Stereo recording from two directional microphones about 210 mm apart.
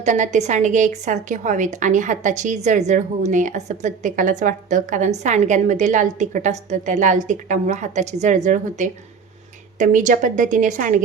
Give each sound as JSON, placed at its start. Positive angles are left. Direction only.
{"t": 0.0, "sound": "a woman's voice", "side_deg": -35}